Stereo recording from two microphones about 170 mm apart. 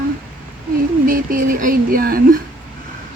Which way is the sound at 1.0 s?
55° right (ahead or behind).